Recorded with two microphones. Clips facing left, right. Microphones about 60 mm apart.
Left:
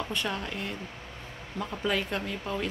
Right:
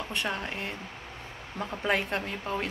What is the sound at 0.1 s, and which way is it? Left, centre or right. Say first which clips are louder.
Speech: even; right.